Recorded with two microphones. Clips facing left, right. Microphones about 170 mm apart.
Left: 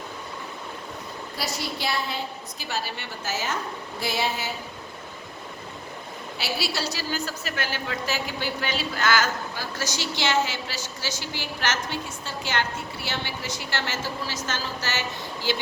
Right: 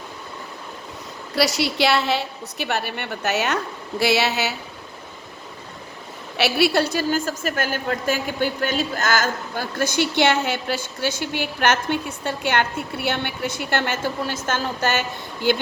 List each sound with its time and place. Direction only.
1.4 s a woman's voice: 80° right
6.3 s a woman's voice: 65° right (ahead or behind)